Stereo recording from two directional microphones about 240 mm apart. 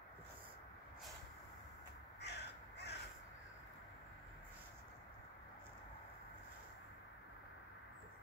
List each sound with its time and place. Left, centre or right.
2.2 s crow: left